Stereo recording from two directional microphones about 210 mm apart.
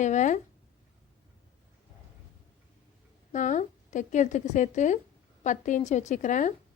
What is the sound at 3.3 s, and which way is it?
A woman's voice, 35° left (ahead or behind).